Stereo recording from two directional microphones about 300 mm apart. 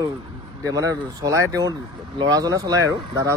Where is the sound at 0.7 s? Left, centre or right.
Centre.